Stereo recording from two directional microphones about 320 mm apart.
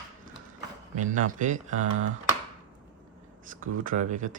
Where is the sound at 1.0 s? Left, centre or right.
Right.